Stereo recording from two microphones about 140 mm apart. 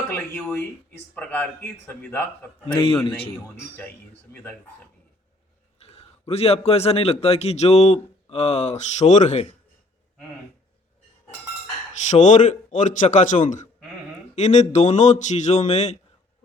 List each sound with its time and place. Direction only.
0.1 s a sound: 5° left (ahead or behind)
0.9 s a man's voice: 10° left (ahead or behind)
2.6 s a man's voice: 40° left (ahead or behind)
4.3 s speech: 20° left (ahead or behind)
5.8 s a man's voice: 45° left (ahead or behind)
12.1 s speech: 60° left (ahead or behind)